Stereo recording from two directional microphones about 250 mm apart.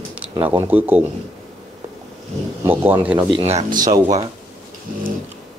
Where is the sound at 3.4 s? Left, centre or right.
Right.